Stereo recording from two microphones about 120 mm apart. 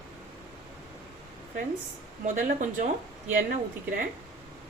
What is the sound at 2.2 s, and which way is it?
Speech, 90° right.